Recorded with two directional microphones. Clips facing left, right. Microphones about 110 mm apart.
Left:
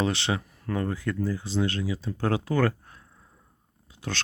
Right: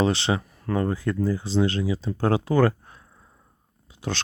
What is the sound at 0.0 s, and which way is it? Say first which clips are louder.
Speech: right 4 dB; 30° right (ahead or behind).